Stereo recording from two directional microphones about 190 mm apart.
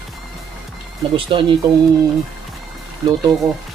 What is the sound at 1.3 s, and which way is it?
Speech, 25° right (ahead or behind).